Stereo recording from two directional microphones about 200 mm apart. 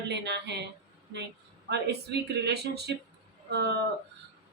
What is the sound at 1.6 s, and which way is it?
Speech, 55° right (ahead or behind).